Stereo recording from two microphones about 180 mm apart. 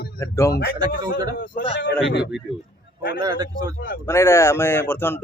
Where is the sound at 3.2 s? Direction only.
20° right (ahead or behind).